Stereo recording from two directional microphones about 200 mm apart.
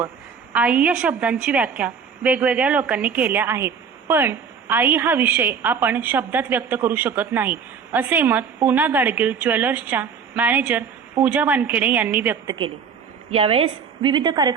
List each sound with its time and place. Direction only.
0.5 s a woman's voice: 5° right (ahead or behind)
13.3 s a woman's voice: 30° right (ahead or behind)